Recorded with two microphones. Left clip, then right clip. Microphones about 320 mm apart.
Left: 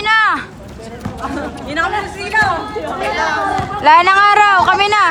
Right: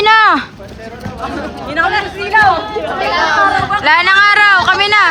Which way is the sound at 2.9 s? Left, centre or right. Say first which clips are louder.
Right 5 dB; right.